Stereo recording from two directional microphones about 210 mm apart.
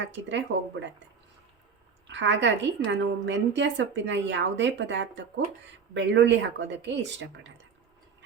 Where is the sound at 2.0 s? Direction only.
60° right (ahead or behind).